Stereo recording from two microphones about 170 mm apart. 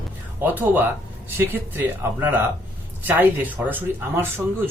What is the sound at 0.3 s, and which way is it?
Speech, 10° right (ahead or behind).